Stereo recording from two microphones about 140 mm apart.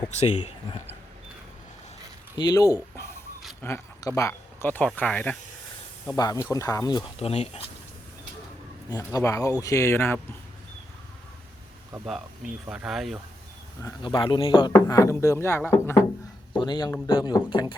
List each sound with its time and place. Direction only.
2.4 s speech: 25° left (ahead or behind)
2.9 s a sound: 20° left (ahead or behind)
3.6 s speech: 15° left (ahead or behind)
6.1 s speech: 25° left (ahead or behind)
7.2 s speech: 45° left (ahead or behind)
9.1 s speech: 25° left (ahead or behind)
12.0 s speech: centre (ahead or behind)
14.0 s speech: 35° left (ahead or behind)
14.7 s speech: 25° left (ahead or behind)
16.5 s speech: 35° left (ahead or behind)